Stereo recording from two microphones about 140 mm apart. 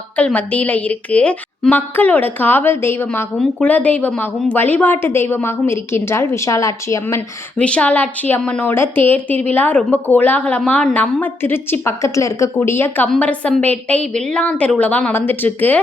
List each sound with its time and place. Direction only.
0.2 s a woman's voice: 10° left (ahead or behind)
7.5 s a woman's voice: 10° left (ahead or behind)